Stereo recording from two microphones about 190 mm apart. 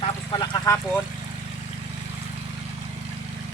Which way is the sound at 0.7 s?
15° left (ahead or behind).